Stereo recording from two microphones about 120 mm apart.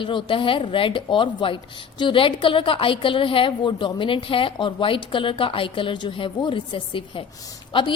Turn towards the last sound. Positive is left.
turn(degrees=45)  # may be behind; listen again after turning